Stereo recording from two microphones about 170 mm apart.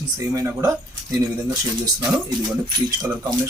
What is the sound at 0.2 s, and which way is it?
Speech, 20° right (ahead or behind).